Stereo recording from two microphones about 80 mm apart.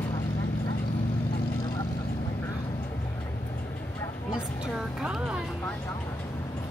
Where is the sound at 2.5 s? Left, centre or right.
Left.